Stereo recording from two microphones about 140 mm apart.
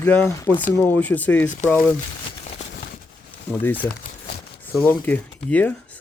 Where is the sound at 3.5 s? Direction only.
15° left (ahead or behind).